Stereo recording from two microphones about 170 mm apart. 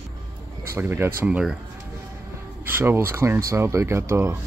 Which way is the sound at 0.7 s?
15° right (ahead or behind).